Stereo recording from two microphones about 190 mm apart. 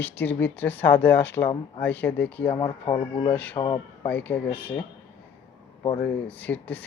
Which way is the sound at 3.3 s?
5° left (ahead or behind).